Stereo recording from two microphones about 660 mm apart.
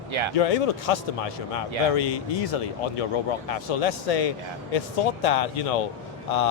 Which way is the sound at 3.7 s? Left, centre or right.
Left.